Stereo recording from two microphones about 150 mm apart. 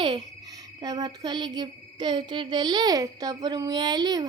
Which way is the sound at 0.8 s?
25° right (ahead or behind).